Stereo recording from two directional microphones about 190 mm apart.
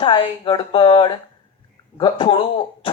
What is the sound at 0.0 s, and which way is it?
Speech, 30° left (ahead or behind).